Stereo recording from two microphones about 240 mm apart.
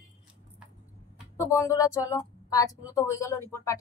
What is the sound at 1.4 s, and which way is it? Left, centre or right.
Speech, centre.